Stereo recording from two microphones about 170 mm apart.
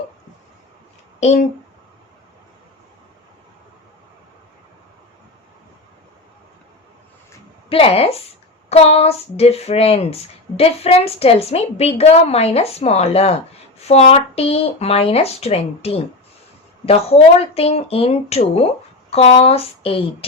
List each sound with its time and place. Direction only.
1.2 s a woman's voice: 40° left (ahead or behind)
7.7 s a woman's voice: 35° left (ahead or behind)